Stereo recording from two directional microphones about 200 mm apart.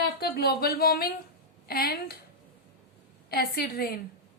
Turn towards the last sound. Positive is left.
turn(degrees=50)  # may be behind; listen again after turning